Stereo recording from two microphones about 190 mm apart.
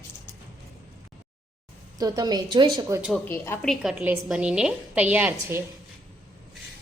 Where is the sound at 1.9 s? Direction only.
20° right (ahead or behind).